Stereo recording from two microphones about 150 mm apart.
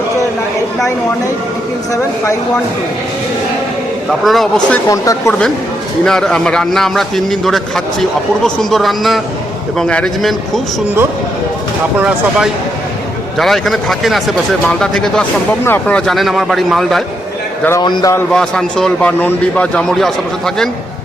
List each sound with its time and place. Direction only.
4.2 s a man's voice: centre (ahead or behind)
4.9 s speech: 20° left (ahead or behind)
6.1 s a man's voice: 5° left (ahead or behind)
11.9 s a man's voice: 5° right (ahead or behind)
17.7 s speech: 25° left (ahead or behind)
18.3 s a man's voice: 5° left (ahead or behind)